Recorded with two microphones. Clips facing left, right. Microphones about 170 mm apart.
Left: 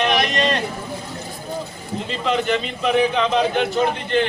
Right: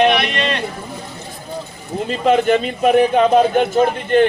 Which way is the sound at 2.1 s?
50° right (ahead or behind).